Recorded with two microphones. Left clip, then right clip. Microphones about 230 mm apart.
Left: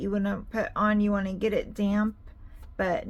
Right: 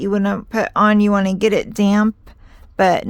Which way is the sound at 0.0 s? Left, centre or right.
Right.